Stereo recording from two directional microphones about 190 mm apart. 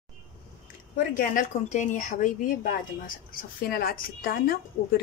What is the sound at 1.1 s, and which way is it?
A woman's voice, 45° left (ahead or behind).